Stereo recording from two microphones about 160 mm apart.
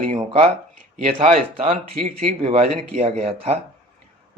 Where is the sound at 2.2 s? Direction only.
40° right (ahead or behind).